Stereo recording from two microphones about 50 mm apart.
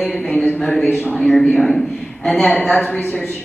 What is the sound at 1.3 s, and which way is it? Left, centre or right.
A woman's voice, centre.